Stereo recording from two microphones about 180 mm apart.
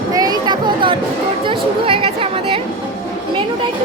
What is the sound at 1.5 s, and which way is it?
Chatter, 30° right (ahead or behind).